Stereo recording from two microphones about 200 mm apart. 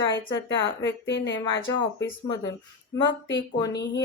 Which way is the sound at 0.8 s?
65° left (ahead or behind).